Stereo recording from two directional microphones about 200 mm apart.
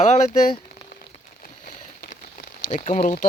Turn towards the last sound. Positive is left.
turn(degrees=40)  # may be behind; listen again after turning